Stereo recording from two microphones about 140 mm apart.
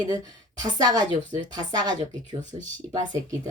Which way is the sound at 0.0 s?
30° right (ahead or behind).